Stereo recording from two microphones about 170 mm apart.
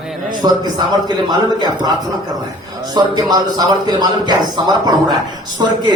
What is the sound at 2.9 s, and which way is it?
A man's voice, 25° right (ahead or behind).